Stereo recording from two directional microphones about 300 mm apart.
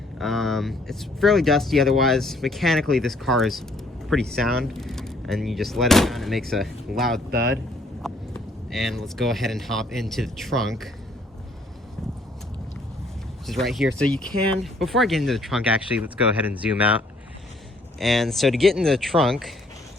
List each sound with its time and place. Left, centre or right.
0.2 s speech: centre
7.3 s speech: right
8.0 s speech: centre
13.5 s speech: centre
18.0 s speech: centre